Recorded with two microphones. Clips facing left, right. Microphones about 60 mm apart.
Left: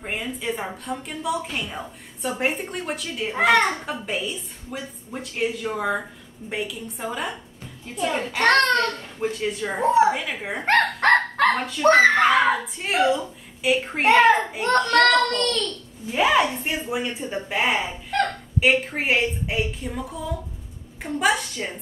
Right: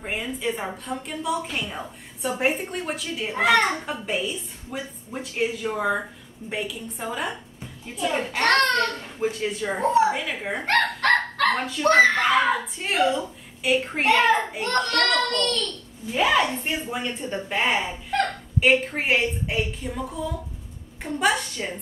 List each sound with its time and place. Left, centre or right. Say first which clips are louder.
0.0 s a woman's voice: right 1 dB; centre
10.6 s speech: left 3 dB; left
11.4 s a child's voice: left 2 dB; centre